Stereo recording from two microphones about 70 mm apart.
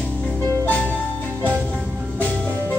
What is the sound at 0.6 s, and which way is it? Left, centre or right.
Music, left.